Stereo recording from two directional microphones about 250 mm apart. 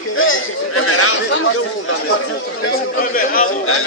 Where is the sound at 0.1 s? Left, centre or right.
Left.